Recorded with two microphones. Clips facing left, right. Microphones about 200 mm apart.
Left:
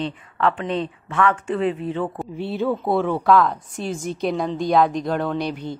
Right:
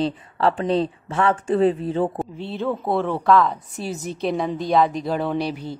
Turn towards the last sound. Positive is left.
turn(degrees=-5)  # may be behind; listen again after turning